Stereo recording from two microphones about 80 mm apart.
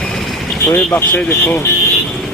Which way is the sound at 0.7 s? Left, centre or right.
Left.